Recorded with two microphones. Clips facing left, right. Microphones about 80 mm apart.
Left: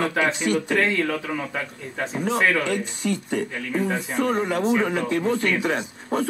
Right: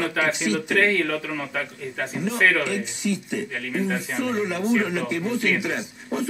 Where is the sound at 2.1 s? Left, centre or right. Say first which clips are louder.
Even; left.